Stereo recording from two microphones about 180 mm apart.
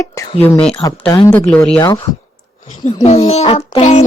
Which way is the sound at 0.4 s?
10° left (ahead or behind).